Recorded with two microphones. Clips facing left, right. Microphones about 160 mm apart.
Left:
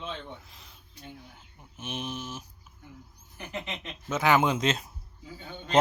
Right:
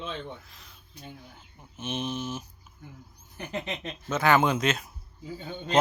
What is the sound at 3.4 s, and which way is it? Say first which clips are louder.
Speech: right 4 dB; 40° right (ahead or behind).